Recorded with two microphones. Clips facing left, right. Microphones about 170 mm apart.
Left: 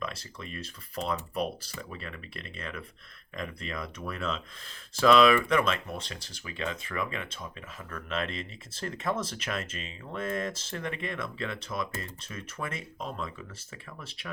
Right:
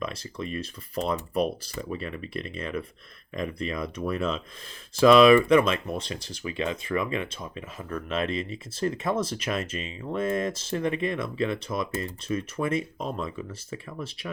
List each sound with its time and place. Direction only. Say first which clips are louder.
0.0 s speech: right 6 dB; 15° right (ahead or behind)